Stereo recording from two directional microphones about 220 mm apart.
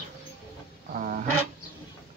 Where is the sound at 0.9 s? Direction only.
35° right (ahead or behind).